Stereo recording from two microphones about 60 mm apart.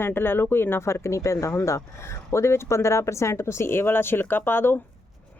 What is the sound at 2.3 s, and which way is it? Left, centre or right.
Speech, left.